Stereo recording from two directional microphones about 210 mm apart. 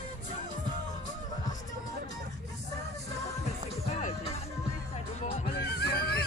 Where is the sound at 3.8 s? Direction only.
30° left (ahead or behind).